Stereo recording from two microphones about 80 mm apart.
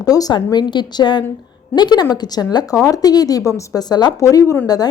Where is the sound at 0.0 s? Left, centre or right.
Left.